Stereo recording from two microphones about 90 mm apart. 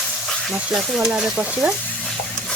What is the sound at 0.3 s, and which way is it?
Speech, centre (ahead or behind).